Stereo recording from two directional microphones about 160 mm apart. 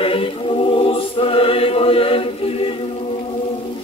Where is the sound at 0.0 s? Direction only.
35° left (ahead or behind).